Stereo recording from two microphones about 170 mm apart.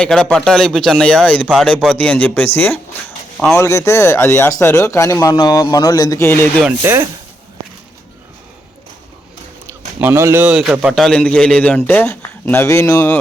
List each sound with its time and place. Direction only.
0.0 s speech: 5° left (ahead or behind)
6.6 s speech: 10° right (ahead or behind)
10.0 s speech: 15° right (ahead or behind); by 13.1 s 15° left (ahead or behind)